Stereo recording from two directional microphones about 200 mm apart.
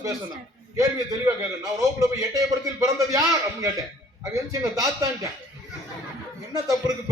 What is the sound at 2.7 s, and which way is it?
A man's voice, 15° right (ahead or behind).